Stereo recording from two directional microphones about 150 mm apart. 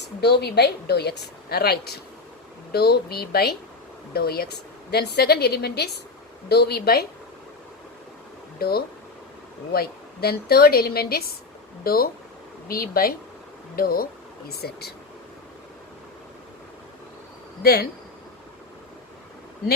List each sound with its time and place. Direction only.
0.2 s a woman's voice: 90° left
8.5 s a woman's voice: 90° left
17.6 s a woman's voice: 90° left